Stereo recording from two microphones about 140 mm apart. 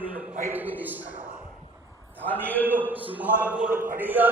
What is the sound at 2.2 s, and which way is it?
Speech, 10° left (ahead or behind).